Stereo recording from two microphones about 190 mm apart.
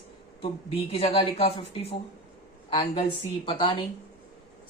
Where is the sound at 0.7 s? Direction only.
30° left (ahead or behind).